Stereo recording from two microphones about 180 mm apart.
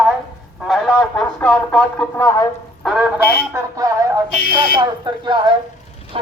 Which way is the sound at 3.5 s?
20° right (ahead or behind).